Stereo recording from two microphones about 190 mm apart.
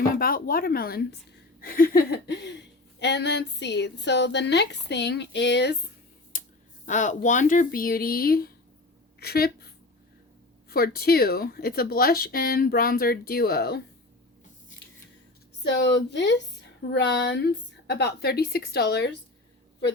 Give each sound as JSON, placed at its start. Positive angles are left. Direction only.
{"t": 0.2, "sound": "speech", "side_deg": 50}
{"t": 6.3, "sound": "a sound", "side_deg": 45}
{"t": 6.8, "sound": "speech", "side_deg": 40}
{"t": 15.6, "sound": "speech", "side_deg": 65}